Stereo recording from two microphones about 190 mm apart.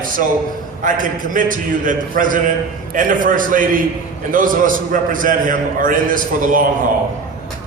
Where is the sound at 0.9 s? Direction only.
45° right (ahead or behind).